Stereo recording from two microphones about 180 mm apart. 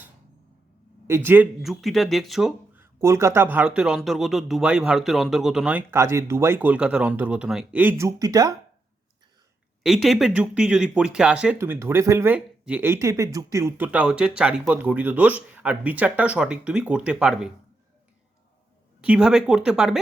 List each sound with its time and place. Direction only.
1.0 s a man's voice: 15° right (ahead or behind)
1.6 s speech: centre (ahead or behind)
2.8 s a man's voice: 15° right (ahead or behind)
9.8 s a man's voice: centre (ahead or behind)
19.0 s speech: 5° right (ahead or behind)